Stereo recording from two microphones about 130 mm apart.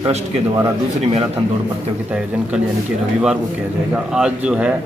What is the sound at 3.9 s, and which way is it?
Speech, 5° right (ahead or behind).